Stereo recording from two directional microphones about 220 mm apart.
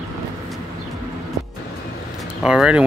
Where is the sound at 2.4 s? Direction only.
5° right (ahead or behind).